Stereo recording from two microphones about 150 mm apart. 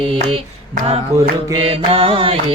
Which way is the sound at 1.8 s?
35° right (ahead or behind).